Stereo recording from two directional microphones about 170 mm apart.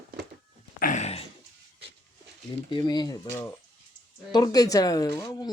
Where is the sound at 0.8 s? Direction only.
45° left (ahead or behind).